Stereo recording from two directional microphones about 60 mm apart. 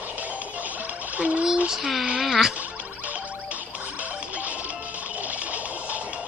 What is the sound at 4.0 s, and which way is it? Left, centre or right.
Music, right.